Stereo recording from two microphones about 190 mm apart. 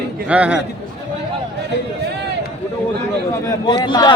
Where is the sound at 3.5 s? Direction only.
20° left (ahead or behind).